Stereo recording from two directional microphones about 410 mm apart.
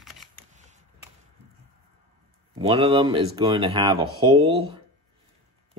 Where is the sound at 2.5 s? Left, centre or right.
Centre.